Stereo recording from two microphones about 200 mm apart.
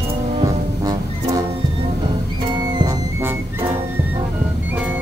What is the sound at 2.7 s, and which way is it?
Music, 20° right (ahead or behind).